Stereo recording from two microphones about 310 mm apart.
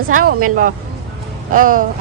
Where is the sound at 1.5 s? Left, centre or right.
Right.